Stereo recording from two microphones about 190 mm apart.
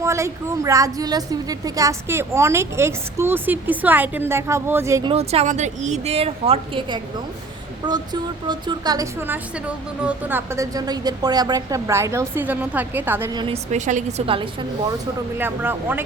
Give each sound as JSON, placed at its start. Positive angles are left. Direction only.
{"t": 0.0, "sound": "speech", "side_deg": -15}
{"t": 5.1, "sound": "a woman's voice", "side_deg": -30}
{"t": 13.3, "sound": "a woman's voice", "side_deg": -25}
{"t": 13.7, "sound": "a woman's voice", "side_deg": -40}
{"t": 15.4, "sound": "speech", "side_deg": -10}